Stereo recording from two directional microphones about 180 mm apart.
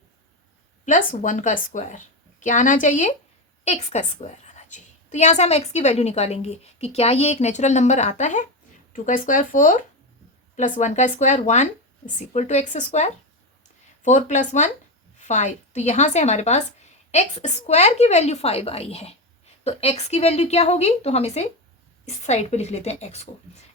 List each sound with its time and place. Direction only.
0.9 s a woman's voice: 45° left (ahead or behind)